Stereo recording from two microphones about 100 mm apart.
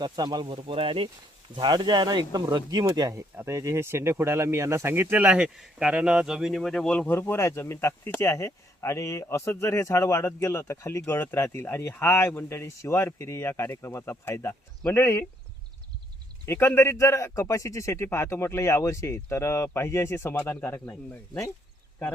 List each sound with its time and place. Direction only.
0.0 s speech: 45° right (ahead or behind); by 1.1 s 60° right (ahead or behind)
1.5 s speech: 50° right (ahead or behind); by 6.6 s 5° right (ahead or behind)
6.6 s speech: 5° left (ahead or behind)
7.2 s speech: 25° left (ahead or behind)
16.5 s speech: 25° left (ahead or behind)